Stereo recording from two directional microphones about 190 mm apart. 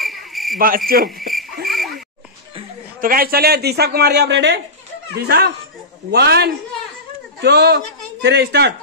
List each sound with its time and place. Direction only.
0.0 s cricket: centre (ahead or behind)
0.6 s speech: 50° right (ahead or behind)
1.3 s frog: centre (ahead or behind)
3.0 s a man's voice: 50° right (ahead or behind); by 4.6 s 65° right (ahead or behind)
5.2 s a man's voice: 55° right (ahead or behind)